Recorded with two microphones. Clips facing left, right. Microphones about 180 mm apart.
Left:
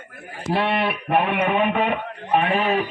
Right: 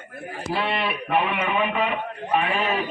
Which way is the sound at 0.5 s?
60° left (ahead or behind).